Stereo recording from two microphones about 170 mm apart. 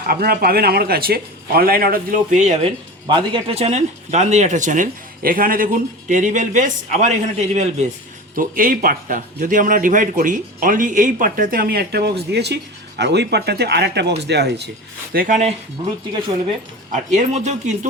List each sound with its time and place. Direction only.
0.0 s a man's voice: 60° right (ahead or behind); by 2.6 s 45° right (ahead or behind)
3.1 s speech: 30° right (ahead or behind)
8.4 s speech: 55° right (ahead or behind); by 14.7 s 75° right (ahead or behind)
15.1 s speech: 55° right (ahead or behind)
16.9 s speech: 45° right (ahead or behind)